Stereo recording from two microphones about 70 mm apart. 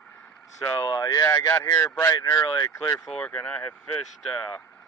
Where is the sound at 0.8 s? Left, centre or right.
Left.